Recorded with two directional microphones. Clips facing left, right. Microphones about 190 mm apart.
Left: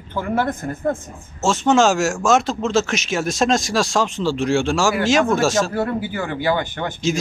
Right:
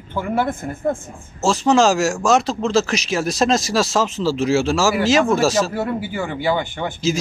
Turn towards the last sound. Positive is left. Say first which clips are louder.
# right 1 dB
turn(degrees=-5)  # may be behind; listen again after turning